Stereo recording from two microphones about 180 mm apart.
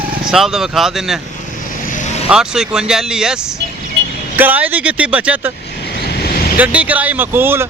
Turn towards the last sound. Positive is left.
turn(degrees=-10)  # may be behind; listen again after turning